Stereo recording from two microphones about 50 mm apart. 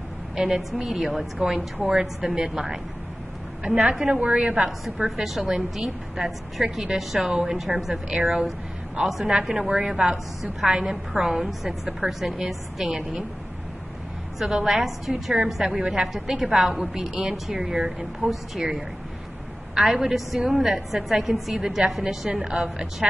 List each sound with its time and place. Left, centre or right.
0.4 s a woman's voice: centre
4.6 s a woman's voice: centre
14.4 s a woman's voice: centre